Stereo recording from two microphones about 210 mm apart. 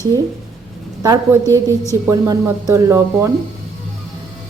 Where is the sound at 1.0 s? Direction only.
15° right (ahead or behind).